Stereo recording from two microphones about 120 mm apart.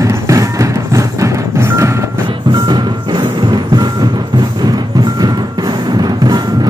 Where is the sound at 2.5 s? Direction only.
35° right (ahead or behind).